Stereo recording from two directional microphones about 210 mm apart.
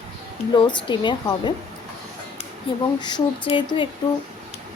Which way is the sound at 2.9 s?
20° left (ahead or behind).